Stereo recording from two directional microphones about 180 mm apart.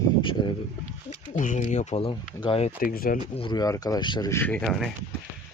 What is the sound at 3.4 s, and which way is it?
Speech, 25° left (ahead or behind).